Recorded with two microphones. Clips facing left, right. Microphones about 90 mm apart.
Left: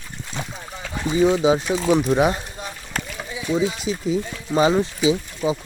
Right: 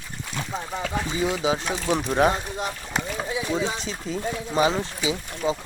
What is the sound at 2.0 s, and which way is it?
Speech, 5° left (ahead or behind).